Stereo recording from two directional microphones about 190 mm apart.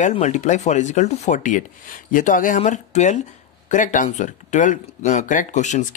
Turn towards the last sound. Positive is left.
turn(degrees=40)  # may be behind; listen again after turning